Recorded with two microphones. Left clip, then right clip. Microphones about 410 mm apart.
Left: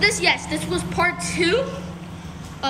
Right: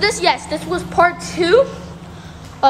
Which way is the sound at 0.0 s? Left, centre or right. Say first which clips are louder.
Right 3 dB; centre.